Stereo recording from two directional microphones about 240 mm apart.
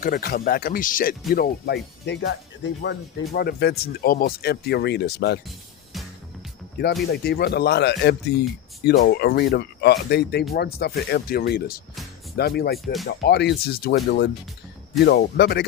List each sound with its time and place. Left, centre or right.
0.0 s speech: left
5.5 s music: centre
7.0 s speech: left
12.7 s speech: centre
13.1 s speech: left